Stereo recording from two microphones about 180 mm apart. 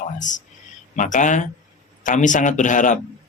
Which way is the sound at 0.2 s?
45° left (ahead or behind).